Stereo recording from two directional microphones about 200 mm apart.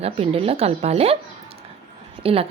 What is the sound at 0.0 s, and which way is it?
Speech, 30° right (ahead or behind).